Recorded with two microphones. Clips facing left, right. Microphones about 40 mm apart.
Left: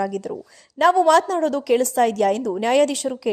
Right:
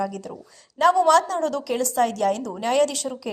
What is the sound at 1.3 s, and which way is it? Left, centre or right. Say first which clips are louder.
Speech: left 3 dB; left.